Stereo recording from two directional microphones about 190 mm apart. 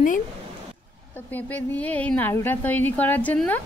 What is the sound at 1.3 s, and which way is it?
A woman's voice, 10° left (ahead or behind).